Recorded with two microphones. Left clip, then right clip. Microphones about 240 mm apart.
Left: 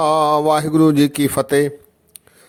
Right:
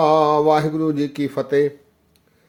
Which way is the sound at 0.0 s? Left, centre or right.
Left.